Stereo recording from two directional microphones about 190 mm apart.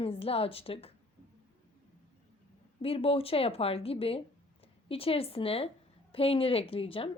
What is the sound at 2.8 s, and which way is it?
A woman's voice, 30° left (ahead or behind).